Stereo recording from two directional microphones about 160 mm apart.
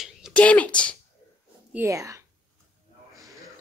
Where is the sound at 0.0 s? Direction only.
5° right (ahead or behind).